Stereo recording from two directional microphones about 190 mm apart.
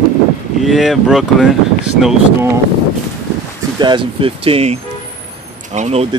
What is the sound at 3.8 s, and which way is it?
Speech, 25° right (ahead or behind).